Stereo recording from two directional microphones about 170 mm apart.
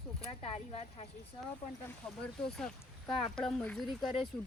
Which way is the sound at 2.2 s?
5° left (ahead or behind).